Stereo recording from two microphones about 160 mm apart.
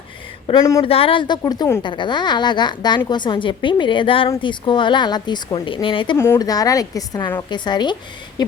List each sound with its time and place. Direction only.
0.8 s a woman's voice: 35° left (ahead or behind)
6.1 s a woman's voice: 15° left (ahead or behind)